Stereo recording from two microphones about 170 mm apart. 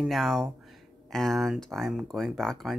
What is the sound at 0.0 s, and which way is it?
Speech, centre (ahead or behind).